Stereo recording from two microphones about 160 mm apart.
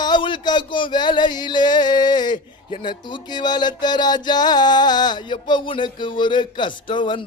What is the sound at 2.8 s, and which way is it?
Music, 30° left (ahead or behind).